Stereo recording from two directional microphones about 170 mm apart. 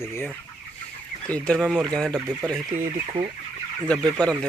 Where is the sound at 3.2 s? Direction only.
35° right (ahead or behind).